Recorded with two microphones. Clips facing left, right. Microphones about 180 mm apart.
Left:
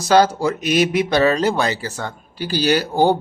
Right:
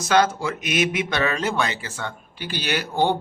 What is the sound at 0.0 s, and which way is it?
Speech, 35° left (ahead or behind).